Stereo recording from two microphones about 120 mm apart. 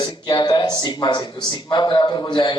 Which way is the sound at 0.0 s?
40° left (ahead or behind).